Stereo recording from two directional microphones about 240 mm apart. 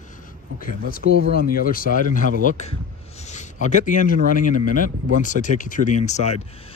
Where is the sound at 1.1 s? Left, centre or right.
Left.